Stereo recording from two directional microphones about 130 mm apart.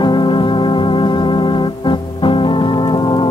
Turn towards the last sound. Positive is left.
turn(degrees=35)  # may be behind; listen again after turning